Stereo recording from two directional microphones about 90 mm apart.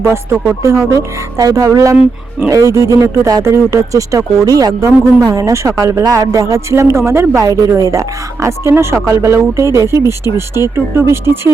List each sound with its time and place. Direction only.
0.0 s speech: 30° right (ahead or behind)